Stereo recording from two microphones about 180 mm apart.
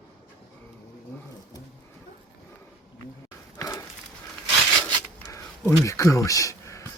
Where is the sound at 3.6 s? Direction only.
15° left (ahead or behind).